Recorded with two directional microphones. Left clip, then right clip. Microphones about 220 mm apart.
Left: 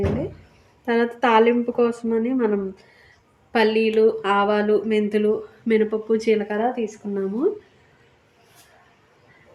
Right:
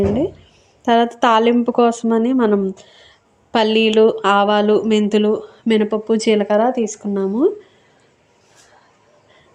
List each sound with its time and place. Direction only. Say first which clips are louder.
0.9 s speech: right 6 dB; 35° right (ahead or behind)